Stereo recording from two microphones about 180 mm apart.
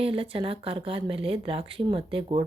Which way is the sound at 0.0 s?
30° right (ahead or behind).